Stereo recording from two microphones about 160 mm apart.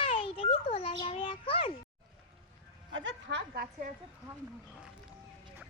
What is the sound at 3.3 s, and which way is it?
Speech, 70° right (ahead or behind).